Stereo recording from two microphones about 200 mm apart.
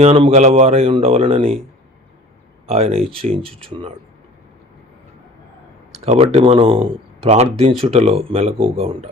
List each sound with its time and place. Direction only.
0.0 s speech: 30° right (ahead or behind)
2.6 s speech: 30° right (ahead or behind)
6.1 s speech: 30° right (ahead or behind)